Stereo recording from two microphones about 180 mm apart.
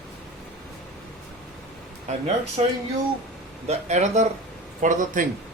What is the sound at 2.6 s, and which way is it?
Speech, 30° right (ahead or behind).